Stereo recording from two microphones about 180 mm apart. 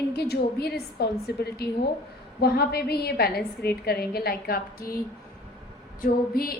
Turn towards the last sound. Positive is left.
turn(degrees=55)  # may be behind; listen again after turning